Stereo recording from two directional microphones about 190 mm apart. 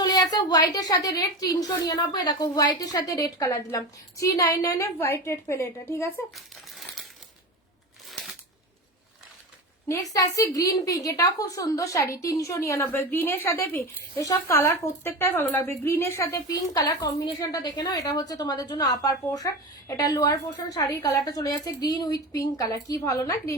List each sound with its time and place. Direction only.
0.0 s a woman's voice: 20° left (ahead or behind)
6.3 s crumpling: centre (ahead or behind)
9.9 s a woman's voice: 15° left (ahead or behind)